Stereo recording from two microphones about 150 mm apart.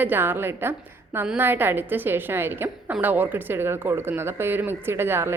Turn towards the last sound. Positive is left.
turn(degrees=-15)  # may be behind; listen again after turning